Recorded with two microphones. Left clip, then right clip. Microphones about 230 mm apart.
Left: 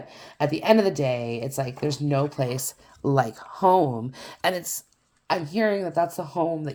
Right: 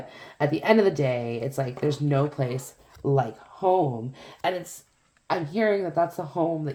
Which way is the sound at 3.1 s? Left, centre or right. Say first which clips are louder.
Left 5 dB; left.